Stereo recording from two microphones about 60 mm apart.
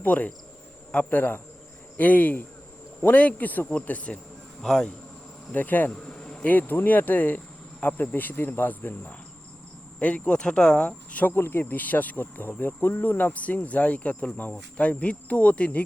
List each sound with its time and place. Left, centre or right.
0.0 s speech: left
4.6 s speech: centre
5.5 s speech: left
5.9 s insect: centre
6.5 s speech: left; by 10.8 s centre
10.8 s speech: left
11.3 s speech: left
11.7 s speech: left